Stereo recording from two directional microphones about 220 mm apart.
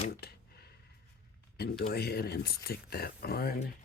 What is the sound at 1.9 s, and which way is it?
Speech, 45° left (ahead or behind).